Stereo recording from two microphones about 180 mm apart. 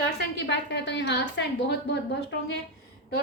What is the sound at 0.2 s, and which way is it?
A woman's voice, 70° left (ahead or behind).